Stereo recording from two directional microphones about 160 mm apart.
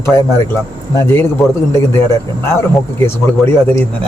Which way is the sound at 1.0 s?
15° left (ahead or behind).